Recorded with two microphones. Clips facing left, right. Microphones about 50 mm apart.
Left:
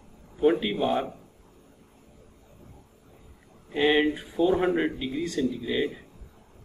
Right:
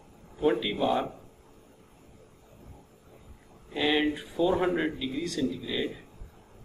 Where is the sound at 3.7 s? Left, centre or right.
Left.